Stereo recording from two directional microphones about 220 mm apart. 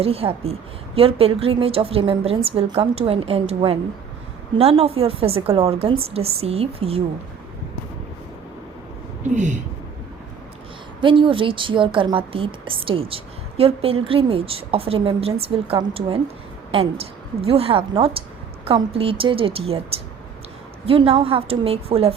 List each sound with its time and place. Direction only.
0.0 s a woman's voice: 25° right (ahead or behind)
9.2 s speech: 35° right (ahead or behind)
11.0 s a woman's voice: 25° right (ahead or behind)